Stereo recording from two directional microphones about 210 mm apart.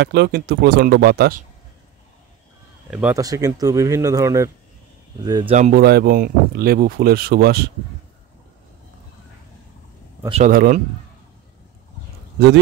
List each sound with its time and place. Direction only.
0.0 s speech: 50° right (ahead or behind)
2.9 s speech: 5° right (ahead or behind)
3.2 s speech: 15° right (ahead or behind); by 7.7 s 50° right (ahead or behind)
10.2 s a man's voice: 30° right (ahead or behind)
10.5 s speech: 45° right (ahead or behind)